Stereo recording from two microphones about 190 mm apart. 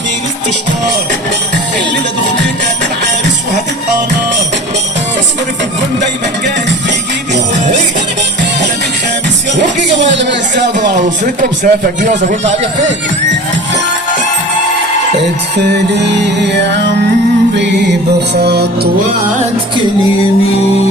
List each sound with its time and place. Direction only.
9.6 s a sound: 70° right (ahead or behind)
11.3 s speech: 40° right (ahead or behind)
16.0 s music: 65° right (ahead or behind)
18.3 s music: 60° right (ahead or behind)